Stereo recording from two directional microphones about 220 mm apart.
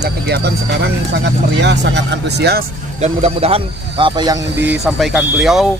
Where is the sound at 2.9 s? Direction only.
25° right (ahead or behind).